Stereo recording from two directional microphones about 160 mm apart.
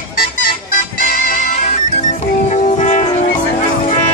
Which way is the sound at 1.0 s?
60° left (ahead or behind).